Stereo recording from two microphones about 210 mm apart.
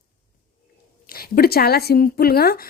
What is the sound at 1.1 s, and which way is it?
A woman's voice, 45° left (ahead or behind).